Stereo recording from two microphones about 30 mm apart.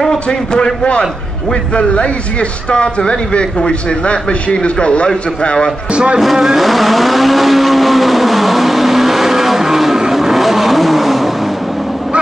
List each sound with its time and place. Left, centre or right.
0.3 s a man's voice: left
2.7 s a man's voice: left
6.3 s vehicle: centre